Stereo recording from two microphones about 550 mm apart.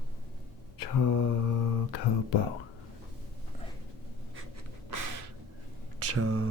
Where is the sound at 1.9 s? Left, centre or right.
Left.